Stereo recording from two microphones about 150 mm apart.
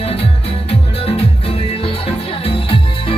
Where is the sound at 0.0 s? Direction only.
40° left (ahead or behind).